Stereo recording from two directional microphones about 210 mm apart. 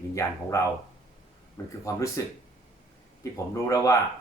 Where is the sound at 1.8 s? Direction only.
15° left (ahead or behind).